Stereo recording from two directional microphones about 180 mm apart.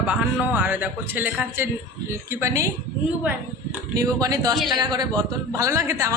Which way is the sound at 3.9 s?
20° right (ahead or behind).